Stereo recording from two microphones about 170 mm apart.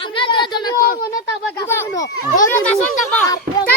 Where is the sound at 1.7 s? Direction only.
15° left (ahead or behind).